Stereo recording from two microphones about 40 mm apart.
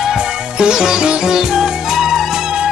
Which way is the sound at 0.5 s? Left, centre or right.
Centre.